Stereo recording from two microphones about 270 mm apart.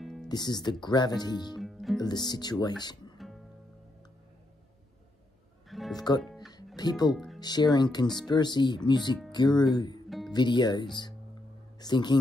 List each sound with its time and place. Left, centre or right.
0.0 s music: centre
0.3 s speech: centre
1.6 s music: centre
2.0 s speech: centre
2.8 s music: centre
5.7 s music: centre
5.9 s speech: centre
10.0 s music: centre
10.3 s speech: centre